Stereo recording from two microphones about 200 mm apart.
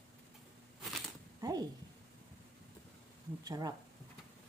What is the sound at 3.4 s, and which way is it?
Speech, 20° right (ahead or behind).